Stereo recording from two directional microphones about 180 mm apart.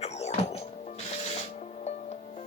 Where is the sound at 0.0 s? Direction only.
35° left (ahead or behind).